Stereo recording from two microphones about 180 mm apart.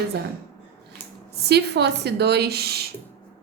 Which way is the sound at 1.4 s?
65° right (ahead or behind).